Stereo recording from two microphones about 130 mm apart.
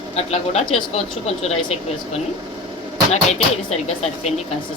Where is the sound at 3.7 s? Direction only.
55° left (ahead or behind).